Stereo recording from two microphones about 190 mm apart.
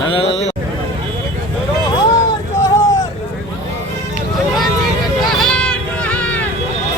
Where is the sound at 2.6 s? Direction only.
20° left (ahead or behind).